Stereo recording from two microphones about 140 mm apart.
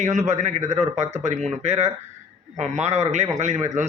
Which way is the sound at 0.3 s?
55° right (ahead or behind).